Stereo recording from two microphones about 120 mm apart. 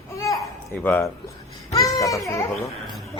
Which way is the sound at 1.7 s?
30° left (ahead or behind).